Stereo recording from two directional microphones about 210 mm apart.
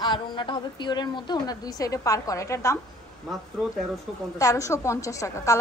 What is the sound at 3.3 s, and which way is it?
Speech, centre (ahead or behind).